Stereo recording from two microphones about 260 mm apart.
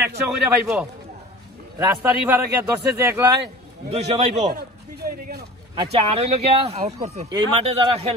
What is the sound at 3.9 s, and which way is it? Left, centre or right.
Speech, right.